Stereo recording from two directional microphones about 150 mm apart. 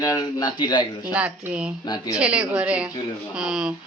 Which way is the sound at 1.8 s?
25° left (ahead or behind).